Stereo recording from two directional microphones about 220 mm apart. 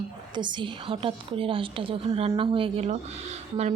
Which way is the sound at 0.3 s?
20° right (ahead or behind).